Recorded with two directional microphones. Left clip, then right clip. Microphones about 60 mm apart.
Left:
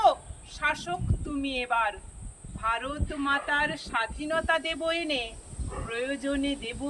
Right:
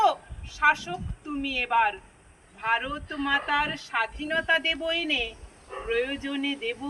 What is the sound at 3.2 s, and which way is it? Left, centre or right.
Speech, left.